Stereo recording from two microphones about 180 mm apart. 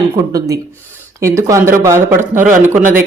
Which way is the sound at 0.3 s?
20° right (ahead or behind).